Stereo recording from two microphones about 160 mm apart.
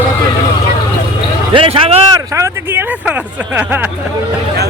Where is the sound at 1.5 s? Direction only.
35° right (ahead or behind).